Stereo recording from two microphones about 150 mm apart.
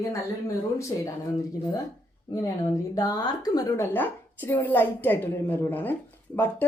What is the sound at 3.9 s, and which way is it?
Speech, 10° left (ahead or behind).